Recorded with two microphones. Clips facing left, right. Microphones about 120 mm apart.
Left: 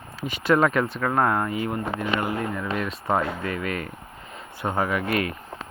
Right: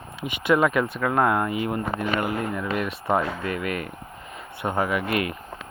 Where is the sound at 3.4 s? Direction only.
30° left (ahead or behind).